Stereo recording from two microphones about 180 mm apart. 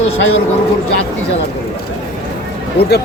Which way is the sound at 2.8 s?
70° left (ahead or behind).